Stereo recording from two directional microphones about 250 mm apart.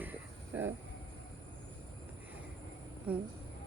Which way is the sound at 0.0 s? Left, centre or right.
Centre.